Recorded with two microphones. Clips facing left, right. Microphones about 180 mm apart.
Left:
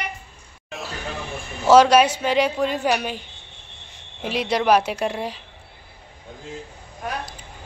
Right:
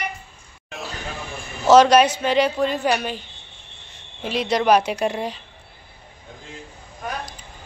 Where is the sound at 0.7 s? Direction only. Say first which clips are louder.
Even; centre (ahead or behind).